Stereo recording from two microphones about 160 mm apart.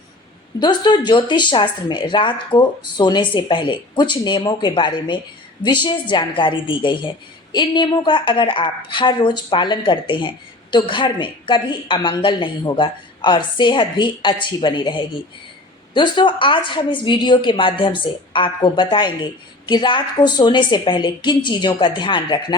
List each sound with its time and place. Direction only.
0.6 s a woman's voice: 25° left (ahead or behind)